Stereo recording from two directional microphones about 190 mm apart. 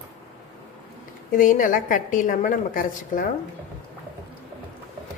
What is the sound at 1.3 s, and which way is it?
A woman's voice, 45° left (ahead or behind).